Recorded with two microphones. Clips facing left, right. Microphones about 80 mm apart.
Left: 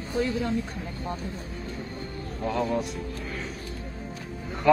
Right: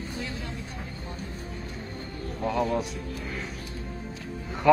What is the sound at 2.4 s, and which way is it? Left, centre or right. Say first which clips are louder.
A man's voice: even; centre.